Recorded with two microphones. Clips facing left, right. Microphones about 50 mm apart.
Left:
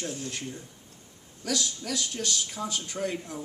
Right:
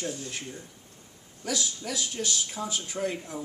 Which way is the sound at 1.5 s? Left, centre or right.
Centre.